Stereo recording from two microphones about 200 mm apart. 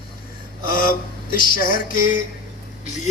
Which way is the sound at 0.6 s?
45° left (ahead or behind).